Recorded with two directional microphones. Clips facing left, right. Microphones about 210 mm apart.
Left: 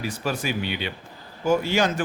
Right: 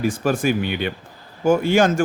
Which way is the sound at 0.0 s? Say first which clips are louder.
Right 8 dB; 50° right (ahead or behind).